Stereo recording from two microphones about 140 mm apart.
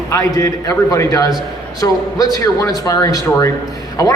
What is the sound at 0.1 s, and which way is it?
A man's voice, 25° left (ahead or behind).